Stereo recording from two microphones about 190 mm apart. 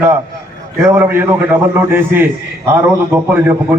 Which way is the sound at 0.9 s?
10° right (ahead or behind).